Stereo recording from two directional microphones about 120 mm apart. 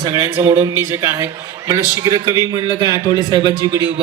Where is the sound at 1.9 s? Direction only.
30° right (ahead or behind).